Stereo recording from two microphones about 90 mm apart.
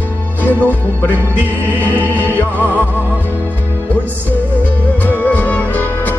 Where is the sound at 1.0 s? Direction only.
20° left (ahead or behind).